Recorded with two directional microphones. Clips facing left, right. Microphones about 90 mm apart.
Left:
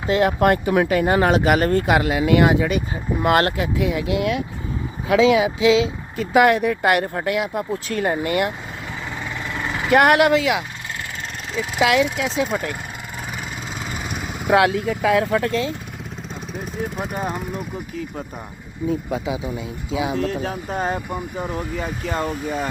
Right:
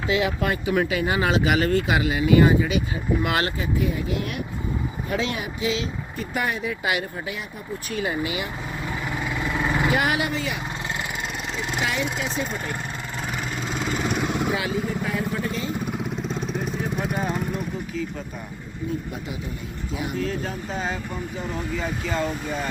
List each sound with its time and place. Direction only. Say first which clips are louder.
0.1 s speech: left 7 dB; 50° left (ahead or behind); by 2.6 s 75° left (ahead or behind)
3.2 s speech: left 11 dB; 50° left (ahead or behind)
3.6 s speech: left 4 dB; 90° left
8.0 s speech: left 7 dB; 50° left (ahead or behind)
9.1 s vehicle: right 3 dB; 10° right (ahead or behind)
9.9 s speech: left 9 dB; 65° left (ahead or behind); by 10.6 s 90° left
11.8 s speech: left 10 dB; 90° left
13.7 s vehicle: right 6 dB; 5° left (ahead or behind)
14.5 s speech: left 9 dB; 70° left (ahead or behind); by 15.7 s 90° left
19.9 s speech: left 6 dB; 90° left
20.2 s speech: left 4 dB; 55° left (ahead or behind)